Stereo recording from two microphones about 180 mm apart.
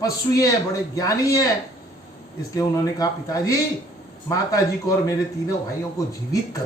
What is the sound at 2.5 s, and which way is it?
Speech, 20° left (ahead or behind).